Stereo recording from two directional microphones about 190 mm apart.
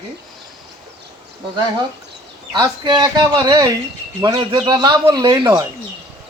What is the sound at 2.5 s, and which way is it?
Speech, 20° right (ahead or behind).